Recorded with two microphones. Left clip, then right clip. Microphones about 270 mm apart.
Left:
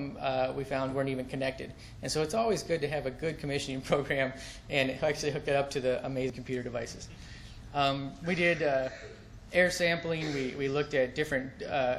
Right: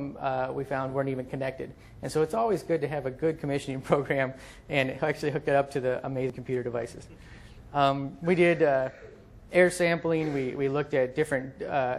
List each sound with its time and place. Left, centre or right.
0.0 s a man's voice: right
7.7 s a man's voice: right